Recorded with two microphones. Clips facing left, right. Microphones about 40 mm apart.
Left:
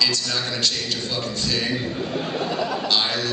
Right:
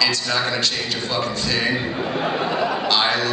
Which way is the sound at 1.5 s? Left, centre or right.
Right.